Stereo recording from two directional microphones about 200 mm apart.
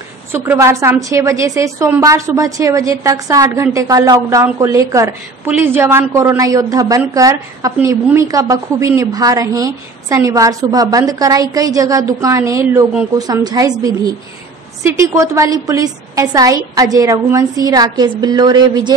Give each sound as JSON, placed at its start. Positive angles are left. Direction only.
{"t": 0.3, "sound": "a woman's voice", "side_deg": -15}